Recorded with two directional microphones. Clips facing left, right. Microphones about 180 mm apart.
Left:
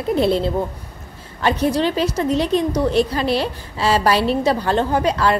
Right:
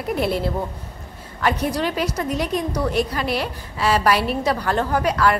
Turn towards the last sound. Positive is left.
turn(degrees=25)  # may be behind; listen again after turning